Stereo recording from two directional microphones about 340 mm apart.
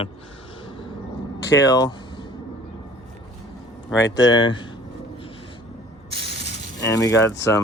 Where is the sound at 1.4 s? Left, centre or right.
Left.